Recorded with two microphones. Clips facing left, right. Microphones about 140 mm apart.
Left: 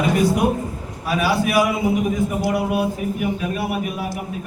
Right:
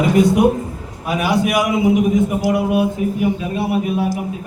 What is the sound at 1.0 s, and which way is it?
A man's voice, 20° right (ahead or behind).